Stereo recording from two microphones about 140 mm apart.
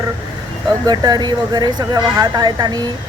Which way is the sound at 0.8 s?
30° right (ahead or behind).